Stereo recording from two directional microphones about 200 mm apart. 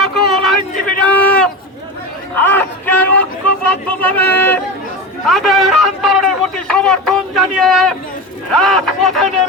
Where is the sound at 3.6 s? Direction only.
5° left (ahead or behind).